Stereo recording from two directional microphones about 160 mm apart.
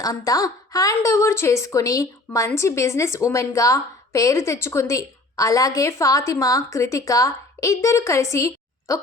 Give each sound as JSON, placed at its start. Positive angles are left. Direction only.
{"t": 0.0, "sound": "a woman's voice", "side_deg": 20}